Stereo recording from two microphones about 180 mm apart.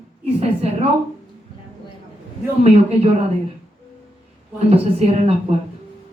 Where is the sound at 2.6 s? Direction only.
35° right (ahead or behind).